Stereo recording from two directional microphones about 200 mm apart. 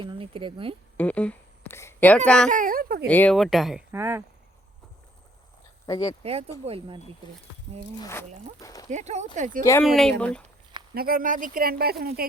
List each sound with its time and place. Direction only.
0.0 s speech: 25° right (ahead or behind)
0.9 s speech: 5° left (ahead or behind)
2.5 s speech: 45° right (ahead or behind)
3.1 s speech: 5° left (ahead or behind); by 4.2 s 10° right (ahead or behind)
5.8 s speech: 20° left (ahead or behind)
6.7 s speech: 25° right (ahead or behind)
7.9 s speech: 15° left (ahead or behind)
8.6 s a sound: 15° left (ahead or behind)
8.9 s speech: 35° right (ahead or behind)
9.8 s speech: centre (ahead or behind)
10.9 s speech: 45° right (ahead or behind)